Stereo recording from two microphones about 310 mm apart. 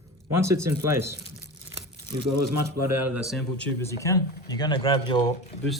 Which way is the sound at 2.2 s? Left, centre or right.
Right.